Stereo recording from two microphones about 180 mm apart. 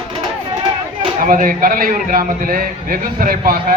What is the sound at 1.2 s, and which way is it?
A man's voice, 50° right (ahead or behind).